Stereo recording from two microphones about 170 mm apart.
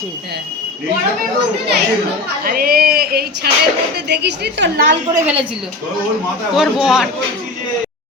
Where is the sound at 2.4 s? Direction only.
60° right (ahead or behind).